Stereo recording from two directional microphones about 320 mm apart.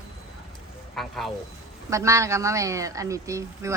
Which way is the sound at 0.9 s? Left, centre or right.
Centre.